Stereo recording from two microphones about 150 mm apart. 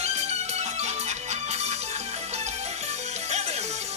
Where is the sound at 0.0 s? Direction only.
45° right (ahead or behind).